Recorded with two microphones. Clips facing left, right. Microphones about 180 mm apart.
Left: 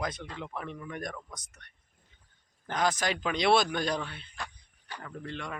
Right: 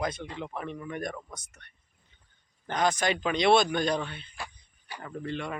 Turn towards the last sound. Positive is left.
turn(degrees=-5)  # may be behind; listen again after turning